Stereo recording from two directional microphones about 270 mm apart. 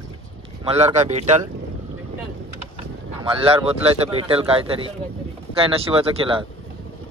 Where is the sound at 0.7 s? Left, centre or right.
Right.